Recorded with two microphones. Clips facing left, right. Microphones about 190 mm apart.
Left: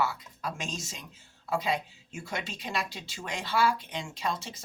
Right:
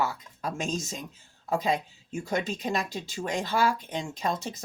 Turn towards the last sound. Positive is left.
turn(degrees=-45)  # may be behind; listen again after turning